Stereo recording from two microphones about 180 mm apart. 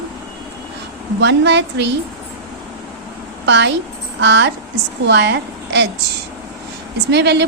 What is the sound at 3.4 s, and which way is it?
A woman's voice, 75° right (ahead or behind).